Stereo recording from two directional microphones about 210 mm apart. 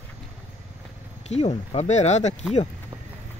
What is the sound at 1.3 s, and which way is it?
Speech, 30° left (ahead or behind).